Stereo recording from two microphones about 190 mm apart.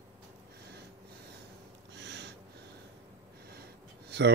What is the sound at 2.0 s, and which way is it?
Snort, 65° right (ahead or behind).